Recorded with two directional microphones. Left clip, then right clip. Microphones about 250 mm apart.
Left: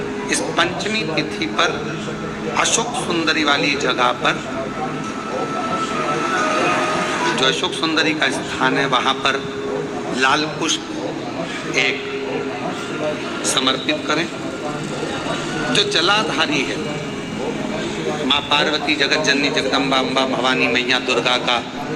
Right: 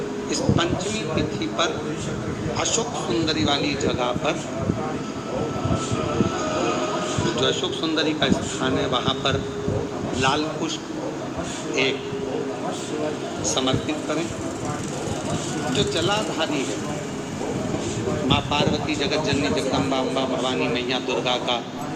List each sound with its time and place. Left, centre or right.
0.5 s a man's voice: left
3.2 s a man's voice: left
6.2 s a man's voice: left
13.6 s a man's voice: left
15.7 s a man's voice: left
18.3 s a man's voice: left